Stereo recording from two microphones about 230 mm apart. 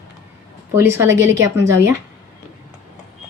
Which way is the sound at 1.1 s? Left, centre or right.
Right.